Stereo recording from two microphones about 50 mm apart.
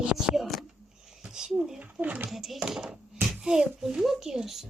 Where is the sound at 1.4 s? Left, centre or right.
Centre.